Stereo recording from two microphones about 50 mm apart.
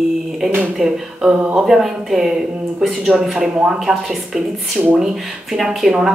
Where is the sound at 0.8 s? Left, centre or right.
Centre.